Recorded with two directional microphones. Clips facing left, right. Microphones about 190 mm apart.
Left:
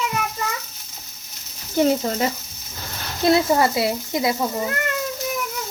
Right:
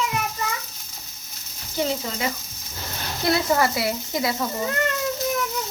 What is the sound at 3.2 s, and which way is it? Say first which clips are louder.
Speech: left 4 dB; 25° left (ahead or behind).